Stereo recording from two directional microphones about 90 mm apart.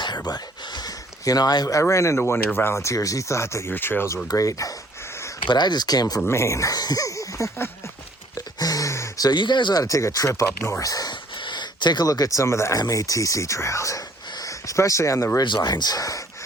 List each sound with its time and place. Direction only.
0.0 s a sound: 50° left (ahead or behind)
1.2 s speech: 45° left (ahead or behind)
1.8 s speech: 35° left (ahead or behind)
3.7 s speech: 20° left (ahead or behind)
4.3 s speech: 40° left (ahead or behind)
5.4 s speech: 55° left (ahead or behind)
6.2 s speech: 30° left (ahead or behind)
8.4 s a sound: 45° left (ahead or behind)
9.3 s speech: 60° left (ahead or behind)
9.8 s speech: 40° left (ahead or behind)
11.4 s speech: 55° left (ahead or behind); by 15.4 s 30° left (ahead or behind)
15.4 s speech: 55° left (ahead or behind)